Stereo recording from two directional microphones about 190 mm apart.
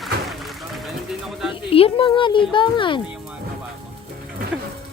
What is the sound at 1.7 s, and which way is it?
Speech, 30° left (ahead or behind).